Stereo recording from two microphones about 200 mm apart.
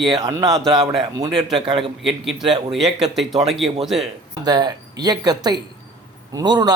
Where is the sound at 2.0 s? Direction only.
Centre (ahead or behind).